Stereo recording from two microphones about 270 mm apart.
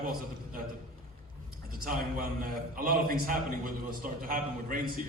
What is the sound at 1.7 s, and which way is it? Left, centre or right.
A man's voice, right.